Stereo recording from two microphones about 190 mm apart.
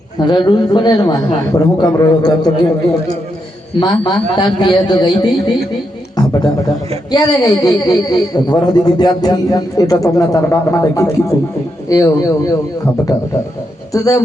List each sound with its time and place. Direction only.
0.2 s a man's voice: 25° left (ahead or behind)
3.8 s a man's voice: 25° left (ahead or behind)
6.1 s a sound: 20° left (ahead or behind)
7.1 s a man's voice: 20° left (ahead or behind)
13.9 s speech: 20° left (ahead or behind)